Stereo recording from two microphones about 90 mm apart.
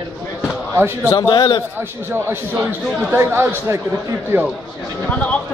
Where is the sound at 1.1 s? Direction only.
55° left (ahead or behind).